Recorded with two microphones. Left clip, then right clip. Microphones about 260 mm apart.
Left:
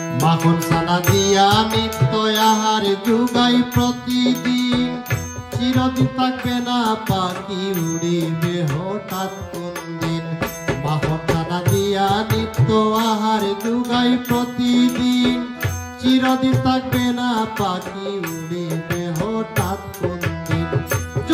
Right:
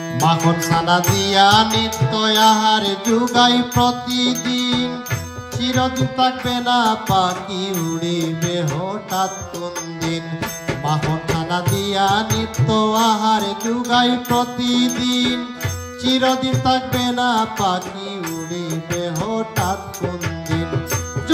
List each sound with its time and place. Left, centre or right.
0.3 s music: right
10.9 s music: right